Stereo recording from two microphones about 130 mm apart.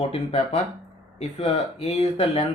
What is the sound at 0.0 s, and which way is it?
Speech, 55° left (ahead or behind).